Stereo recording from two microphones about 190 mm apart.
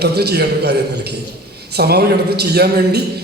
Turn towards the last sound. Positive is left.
turn(degrees=-55)  # may be behind; listen again after turning